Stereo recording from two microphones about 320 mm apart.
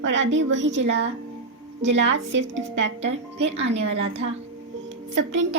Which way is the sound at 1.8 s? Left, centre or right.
Right.